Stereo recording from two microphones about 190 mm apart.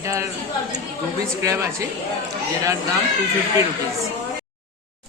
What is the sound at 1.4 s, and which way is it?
Speech, 15° right (ahead or behind).